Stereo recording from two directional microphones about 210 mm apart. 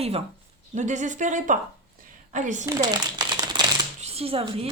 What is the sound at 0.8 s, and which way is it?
A woman's voice, 35° right (ahead or behind).